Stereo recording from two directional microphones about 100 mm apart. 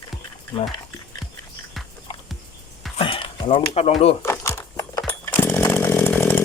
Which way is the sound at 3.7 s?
80° left.